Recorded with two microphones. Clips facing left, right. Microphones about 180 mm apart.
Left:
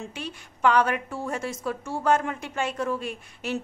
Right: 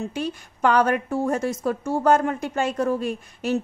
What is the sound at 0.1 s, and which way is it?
A woman's voice, 45° right (ahead or behind).